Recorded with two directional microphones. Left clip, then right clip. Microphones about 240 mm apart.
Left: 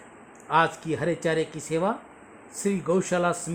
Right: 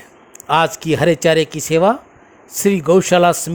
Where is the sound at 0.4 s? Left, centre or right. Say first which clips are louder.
Right 8 dB; right.